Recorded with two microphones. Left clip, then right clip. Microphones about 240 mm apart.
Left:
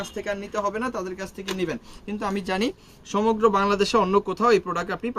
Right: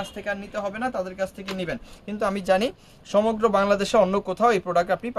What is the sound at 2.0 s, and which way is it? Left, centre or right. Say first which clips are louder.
Speech: right 5 dB; right.